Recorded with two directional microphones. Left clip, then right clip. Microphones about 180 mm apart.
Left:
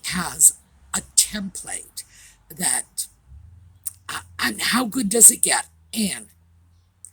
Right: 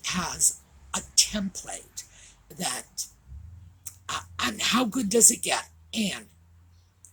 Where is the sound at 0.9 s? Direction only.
40° left (ahead or behind).